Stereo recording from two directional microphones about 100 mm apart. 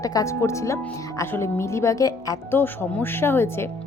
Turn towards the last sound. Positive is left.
turn(degrees=25)  # may be behind; listen again after turning